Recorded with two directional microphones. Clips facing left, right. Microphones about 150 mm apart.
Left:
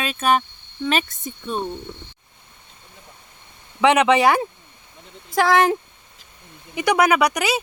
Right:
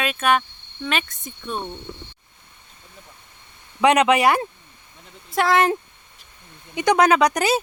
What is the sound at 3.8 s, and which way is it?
Speech, 15° right (ahead or behind).